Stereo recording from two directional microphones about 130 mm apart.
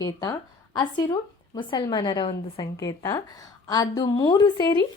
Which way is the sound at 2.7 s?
25° left (ahead or behind).